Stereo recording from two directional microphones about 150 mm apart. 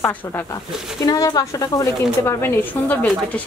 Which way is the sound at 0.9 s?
25° left (ahead or behind).